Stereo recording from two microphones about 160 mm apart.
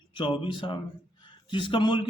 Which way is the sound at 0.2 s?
30° left (ahead or behind).